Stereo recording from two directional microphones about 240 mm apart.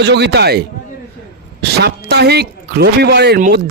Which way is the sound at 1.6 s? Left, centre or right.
Right.